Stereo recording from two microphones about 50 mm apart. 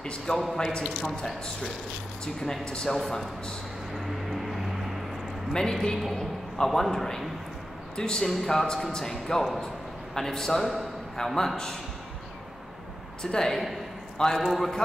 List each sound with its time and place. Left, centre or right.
0.0 s a man's voice: centre
2.6 s a man's voice: centre
3.9 s music: centre
5.5 s a man's voice: centre
9.3 s a man's voice: centre
13.2 s a man's voice: centre